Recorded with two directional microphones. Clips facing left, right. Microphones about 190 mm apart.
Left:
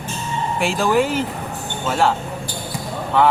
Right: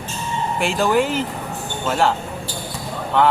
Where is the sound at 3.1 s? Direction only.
Centre (ahead or behind).